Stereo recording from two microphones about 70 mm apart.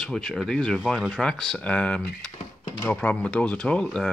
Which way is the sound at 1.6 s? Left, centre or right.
Centre.